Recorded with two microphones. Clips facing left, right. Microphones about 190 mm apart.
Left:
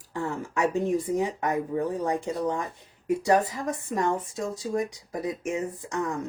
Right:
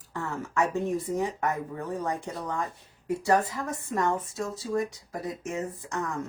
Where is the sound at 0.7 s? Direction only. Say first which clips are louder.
Left 3 dB; 15° left (ahead or behind).